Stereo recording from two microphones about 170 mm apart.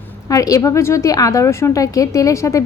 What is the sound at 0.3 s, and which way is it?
A woman's voice, 20° left (ahead or behind).